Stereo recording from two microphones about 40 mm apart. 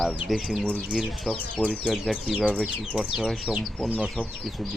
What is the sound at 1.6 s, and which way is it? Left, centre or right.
Speech, right.